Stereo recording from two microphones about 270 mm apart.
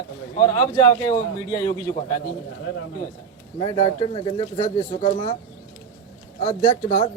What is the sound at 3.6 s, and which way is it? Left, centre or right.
Speech, centre.